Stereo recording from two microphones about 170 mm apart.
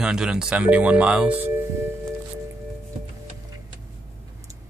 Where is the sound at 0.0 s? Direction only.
5° right (ahead or behind).